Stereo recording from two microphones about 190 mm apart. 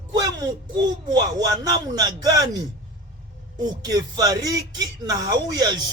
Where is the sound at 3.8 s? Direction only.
20° right (ahead or behind).